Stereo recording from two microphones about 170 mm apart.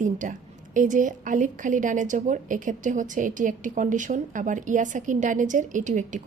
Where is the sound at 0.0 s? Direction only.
50° right (ahead or behind).